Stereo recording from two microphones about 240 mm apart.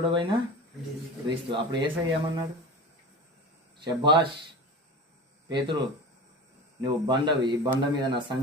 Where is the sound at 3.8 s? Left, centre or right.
Centre.